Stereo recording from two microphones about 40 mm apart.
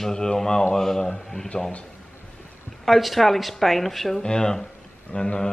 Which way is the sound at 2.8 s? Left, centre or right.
Centre.